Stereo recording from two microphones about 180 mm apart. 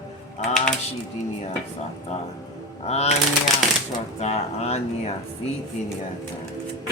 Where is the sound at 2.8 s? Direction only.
35° left (ahead or behind).